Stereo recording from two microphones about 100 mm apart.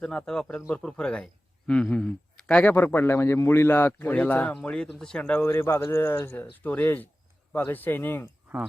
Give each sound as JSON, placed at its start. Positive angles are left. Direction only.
{"t": 0.0, "sound": "a man's voice", "side_deg": 10}
{"t": 5.4, "sound": "speech", "side_deg": 25}